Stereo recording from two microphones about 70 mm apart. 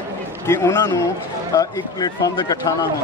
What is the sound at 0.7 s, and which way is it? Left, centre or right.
A man's voice, left.